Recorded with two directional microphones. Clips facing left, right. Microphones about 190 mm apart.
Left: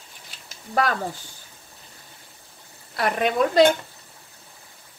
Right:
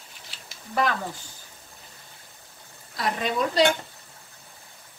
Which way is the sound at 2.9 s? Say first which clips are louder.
Left 5 dB; 60° left (ahead or behind).